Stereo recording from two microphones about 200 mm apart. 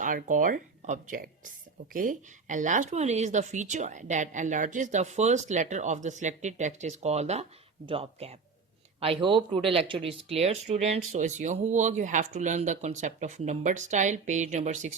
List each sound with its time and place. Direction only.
0.0 s speech: 40° right (ahead or behind)